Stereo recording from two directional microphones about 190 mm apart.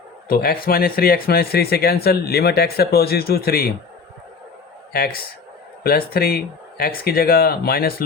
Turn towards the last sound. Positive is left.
turn(degrees=55)  # may be behind; listen again after turning